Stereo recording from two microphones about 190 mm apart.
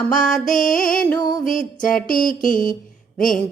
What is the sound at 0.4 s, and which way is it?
Mantra, 45° left (ahead or behind).